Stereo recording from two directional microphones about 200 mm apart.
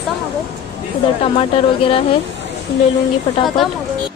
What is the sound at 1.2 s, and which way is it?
Speech, 25° left (ahead or behind).